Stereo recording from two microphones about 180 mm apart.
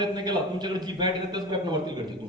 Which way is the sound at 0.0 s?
25° right (ahead or behind).